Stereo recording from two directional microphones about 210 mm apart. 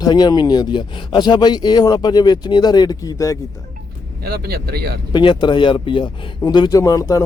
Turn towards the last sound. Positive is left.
turn(degrees=15)  # may be behind; listen again after turning